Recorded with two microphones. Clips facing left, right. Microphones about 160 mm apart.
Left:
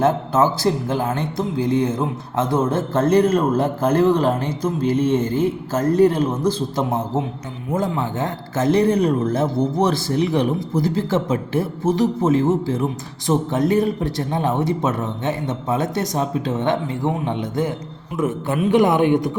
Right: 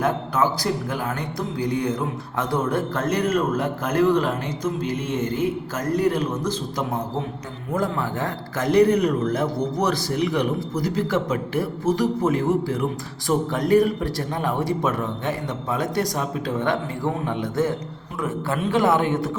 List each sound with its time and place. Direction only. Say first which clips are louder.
0.0 s a man's voice: left 5 dB; 25° left (ahead or behind)